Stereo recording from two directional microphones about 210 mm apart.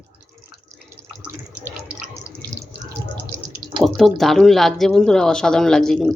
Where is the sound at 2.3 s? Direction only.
15° right (ahead or behind).